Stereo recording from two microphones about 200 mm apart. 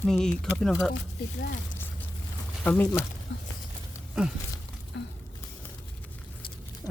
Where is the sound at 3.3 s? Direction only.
60° left (ahead or behind).